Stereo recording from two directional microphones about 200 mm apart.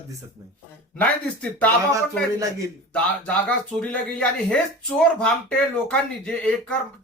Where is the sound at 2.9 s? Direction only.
5° left (ahead or behind).